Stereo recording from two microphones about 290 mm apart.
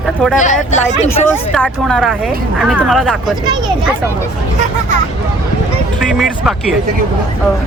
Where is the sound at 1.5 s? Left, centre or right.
Centre.